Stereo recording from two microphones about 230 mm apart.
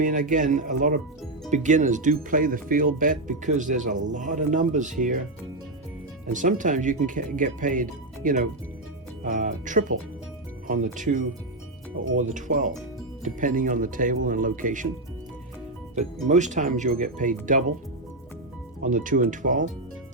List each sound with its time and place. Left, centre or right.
0.0 s speech: right
6.3 s speech: right
16.0 s speech: right
18.8 s speech: right